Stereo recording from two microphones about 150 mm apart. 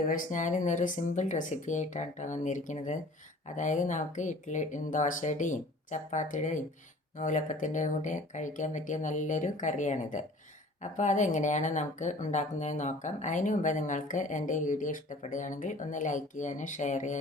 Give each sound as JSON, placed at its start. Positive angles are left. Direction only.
{"t": 0.1, "sound": "speech", "side_deg": 60}